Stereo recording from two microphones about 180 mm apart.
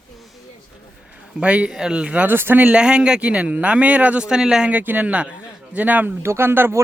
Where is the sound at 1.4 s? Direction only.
5° right (ahead or behind).